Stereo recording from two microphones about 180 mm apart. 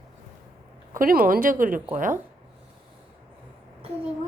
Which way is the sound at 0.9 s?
50° right (ahead or behind).